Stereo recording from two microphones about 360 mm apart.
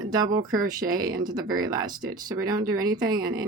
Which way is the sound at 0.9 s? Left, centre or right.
Right.